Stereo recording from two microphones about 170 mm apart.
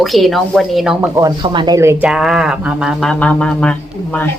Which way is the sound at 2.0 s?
5° right (ahead or behind).